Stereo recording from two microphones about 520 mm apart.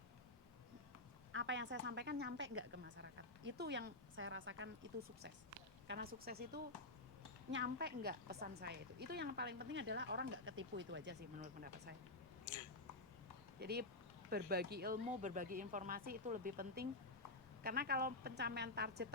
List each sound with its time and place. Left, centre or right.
1.3 s a woman's voice: right
12.5 s a sound: left
13.6 s speech: centre